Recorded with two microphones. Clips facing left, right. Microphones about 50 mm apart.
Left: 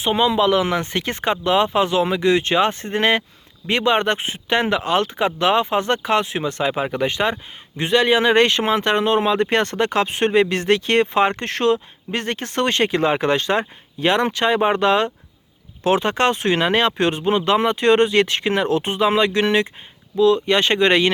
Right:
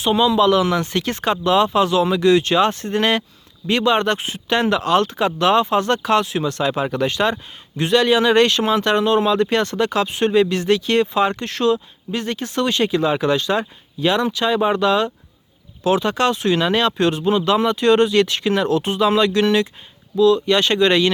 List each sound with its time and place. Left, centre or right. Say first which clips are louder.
0.0 s speech: right 2 dB; left